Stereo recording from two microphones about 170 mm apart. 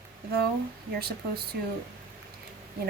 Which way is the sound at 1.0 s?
65° right (ahead or behind).